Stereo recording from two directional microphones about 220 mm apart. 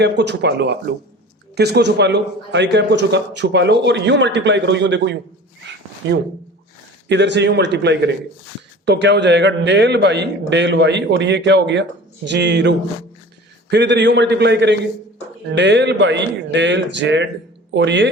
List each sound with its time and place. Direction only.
0.0 s a man's voice: 50° right (ahead or behind)